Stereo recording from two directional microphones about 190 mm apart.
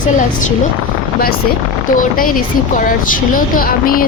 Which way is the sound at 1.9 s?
45° left (ahead or behind).